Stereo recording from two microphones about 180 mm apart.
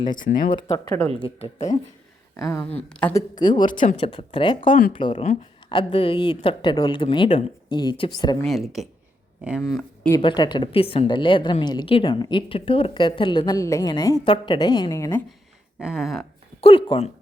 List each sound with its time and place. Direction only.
0.5 s a woman's voice: 25° left (ahead or behind)
2.3 s a sound: 15° left (ahead or behind)
3.2 s a woman's voice: 25° left (ahead or behind)
8.4 s speech: centre (ahead or behind)
10.2 s a woman's voice: 25° left (ahead or behind)
15.8 s speech: 5° right (ahead or behind)
16.6 s speech: 30° left (ahead or behind)